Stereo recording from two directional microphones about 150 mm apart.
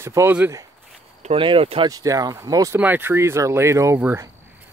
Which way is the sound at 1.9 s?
25° right (ahead or behind).